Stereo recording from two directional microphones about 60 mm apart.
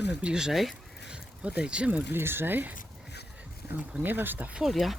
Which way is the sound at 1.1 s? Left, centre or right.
Centre.